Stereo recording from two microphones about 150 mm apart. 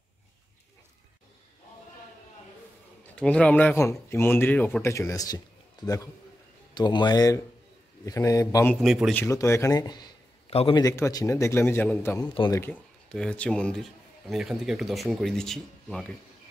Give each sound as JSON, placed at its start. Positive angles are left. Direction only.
{"t": 3.2, "sound": "speech", "side_deg": 5}
{"t": 6.7, "sound": "a man's voice", "side_deg": 30}
{"t": 8.8, "sound": "a man's voice", "side_deg": 0}
{"t": 9.1, "sound": "a man's voice", "side_deg": 15}